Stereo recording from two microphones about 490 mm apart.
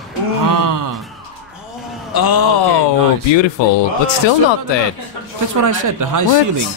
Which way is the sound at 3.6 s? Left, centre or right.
Left.